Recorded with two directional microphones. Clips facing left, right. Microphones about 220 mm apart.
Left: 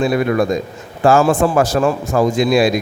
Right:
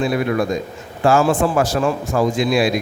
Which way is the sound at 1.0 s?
40° left (ahead or behind).